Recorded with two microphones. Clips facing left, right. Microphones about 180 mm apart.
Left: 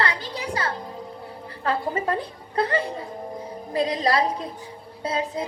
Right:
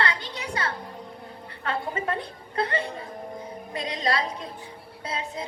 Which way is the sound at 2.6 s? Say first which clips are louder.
Left 4 dB; 30° left (ahead or behind).